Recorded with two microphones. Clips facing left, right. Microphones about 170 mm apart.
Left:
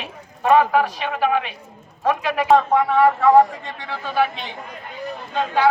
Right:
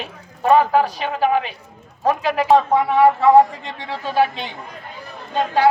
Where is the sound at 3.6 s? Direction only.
30° right (ahead or behind).